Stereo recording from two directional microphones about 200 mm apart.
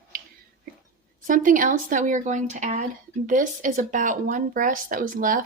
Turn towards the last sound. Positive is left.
turn(degrees=-40)  # may be behind; listen again after turning